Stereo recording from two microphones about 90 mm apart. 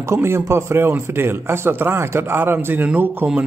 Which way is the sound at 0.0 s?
30° right (ahead or behind).